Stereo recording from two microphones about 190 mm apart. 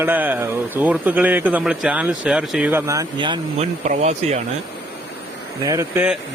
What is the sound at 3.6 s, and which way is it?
Speech, 35° right (ahead or behind).